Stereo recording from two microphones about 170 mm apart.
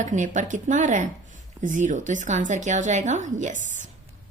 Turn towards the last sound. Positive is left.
turn(degrees=-45)  # may be behind; listen again after turning